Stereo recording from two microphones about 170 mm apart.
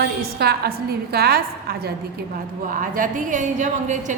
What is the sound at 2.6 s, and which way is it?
A woman's voice, 50° right (ahead or behind).